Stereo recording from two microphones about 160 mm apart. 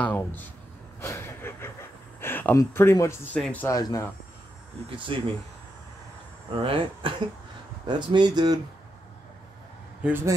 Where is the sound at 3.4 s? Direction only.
10° left (ahead or behind).